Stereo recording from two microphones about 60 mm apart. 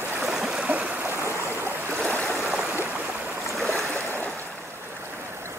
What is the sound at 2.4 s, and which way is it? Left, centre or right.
Stream, centre.